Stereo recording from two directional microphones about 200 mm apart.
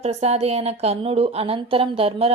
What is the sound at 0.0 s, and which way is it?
A woman's voice, 30° right (ahead or behind).